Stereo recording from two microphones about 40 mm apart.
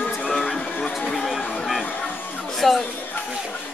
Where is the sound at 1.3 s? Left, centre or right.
Centre.